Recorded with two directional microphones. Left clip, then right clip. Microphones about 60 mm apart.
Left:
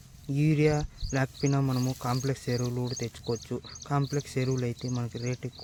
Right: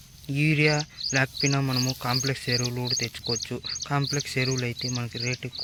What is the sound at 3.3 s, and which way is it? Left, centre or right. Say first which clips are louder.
Speech: right 2 dB; left.